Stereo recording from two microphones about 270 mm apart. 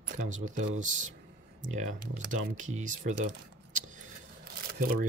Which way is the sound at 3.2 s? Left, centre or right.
Right.